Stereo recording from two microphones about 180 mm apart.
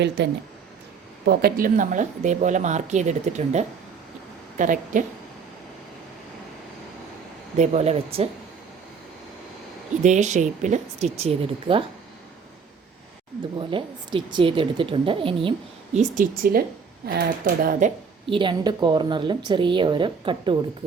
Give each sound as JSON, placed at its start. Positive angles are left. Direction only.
{"t": 1.2, "sound": "speech", "side_deg": -60}
{"t": 7.5, "sound": "speech", "side_deg": -40}
{"t": 10.0, "sound": "speech", "side_deg": -40}
{"t": 13.6, "sound": "a woman's voice", "side_deg": -30}
{"t": 16.0, "sound": "speech", "side_deg": -50}
{"t": 18.3, "sound": "a woman's voice", "side_deg": -25}